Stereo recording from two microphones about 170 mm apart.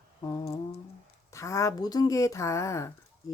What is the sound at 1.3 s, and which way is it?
Speech, 20° left (ahead or behind).